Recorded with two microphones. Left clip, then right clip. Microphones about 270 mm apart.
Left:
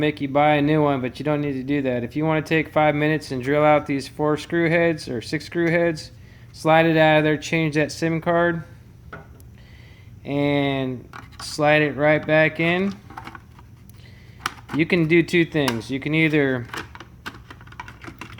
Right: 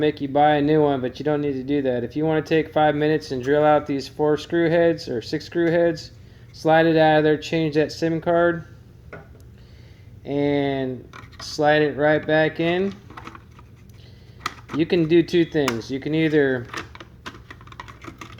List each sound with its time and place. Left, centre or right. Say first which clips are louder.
0.0 s speech: right 1 dB; left
10.2 s speech: even; left
14.8 s speech: even; left
16.7 s typing: even; centre